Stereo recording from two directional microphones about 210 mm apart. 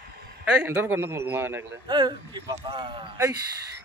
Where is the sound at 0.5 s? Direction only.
10° right (ahead or behind).